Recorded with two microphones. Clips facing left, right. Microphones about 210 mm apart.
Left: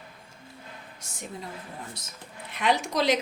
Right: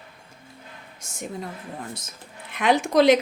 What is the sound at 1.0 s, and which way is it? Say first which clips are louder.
Speech: right 2 dB; 45° right (ahead or behind).